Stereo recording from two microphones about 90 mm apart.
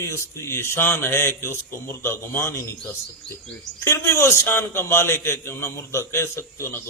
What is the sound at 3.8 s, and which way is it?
A man's voice, 30° left (ahead or behind).